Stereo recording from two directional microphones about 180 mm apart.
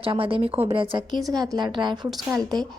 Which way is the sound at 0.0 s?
30° right (ahead or behind).